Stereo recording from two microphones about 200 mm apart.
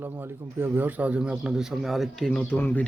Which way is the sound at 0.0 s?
10° right (ahead or behind).